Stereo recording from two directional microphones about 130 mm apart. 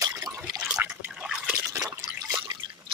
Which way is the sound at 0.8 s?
10° right (ahead or behind).